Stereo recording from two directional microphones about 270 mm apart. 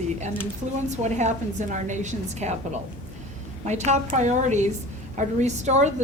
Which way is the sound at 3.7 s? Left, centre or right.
Right.